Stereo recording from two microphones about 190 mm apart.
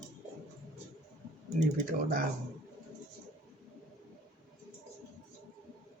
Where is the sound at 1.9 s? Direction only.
45° right (ahead or behind).